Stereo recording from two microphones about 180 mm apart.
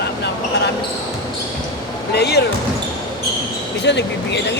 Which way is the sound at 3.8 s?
70° left (ahead or behind).